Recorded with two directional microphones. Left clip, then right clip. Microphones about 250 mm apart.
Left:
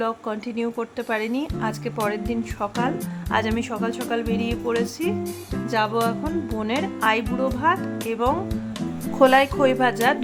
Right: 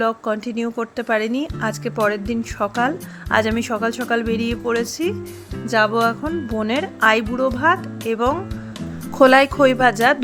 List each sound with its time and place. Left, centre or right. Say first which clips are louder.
0.0 s speech: right 6 dB; centre